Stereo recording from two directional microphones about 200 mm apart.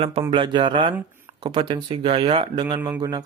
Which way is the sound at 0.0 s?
30° right (ahead or behind).